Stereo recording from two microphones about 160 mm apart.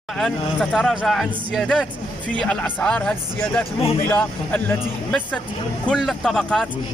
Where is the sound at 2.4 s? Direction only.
5° left (ahead or behind).